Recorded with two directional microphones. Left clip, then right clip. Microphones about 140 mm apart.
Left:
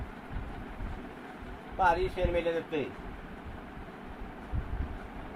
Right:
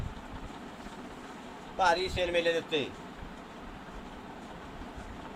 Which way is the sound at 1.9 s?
20° right (ahead or behind).